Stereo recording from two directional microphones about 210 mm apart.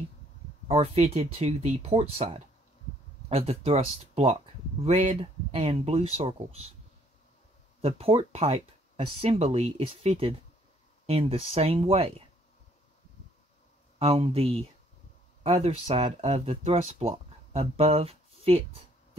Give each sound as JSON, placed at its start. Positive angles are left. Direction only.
{"t": 0.7, "sound": "speech", "side_deg": -30}
{"t": 7.8, "sound": "speech", "side_deg": -25}
{"t": 13.9, "sound": "speech", "side_deg": -25}